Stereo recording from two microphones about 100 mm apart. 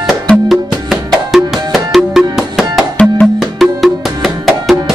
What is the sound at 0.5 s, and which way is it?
Music, centre (ahead or behind).